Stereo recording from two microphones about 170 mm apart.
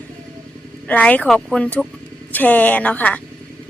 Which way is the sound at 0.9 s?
10° left (ahead or behind).